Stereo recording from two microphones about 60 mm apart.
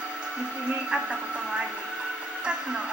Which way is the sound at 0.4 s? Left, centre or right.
Centre.